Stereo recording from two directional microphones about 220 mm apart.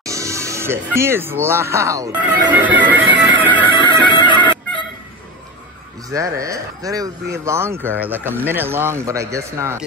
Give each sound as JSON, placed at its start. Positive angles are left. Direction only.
{"t": 0.0, "sound": "speech", "side_deg": -15}
{"t": 3.7, "sound": "music", "side_deg": 20}
{"t": 6.0, "sound": "speech", "side_deg": -15}